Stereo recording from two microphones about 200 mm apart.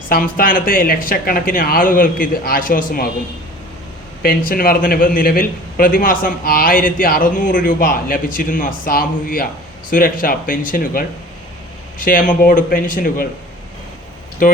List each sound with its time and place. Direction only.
0.1 s speech: 45° left (ahead or behind)
4.2 s speech: 45° left (ahead or behind)
14.4 s speech: 45° left (ahead or behind)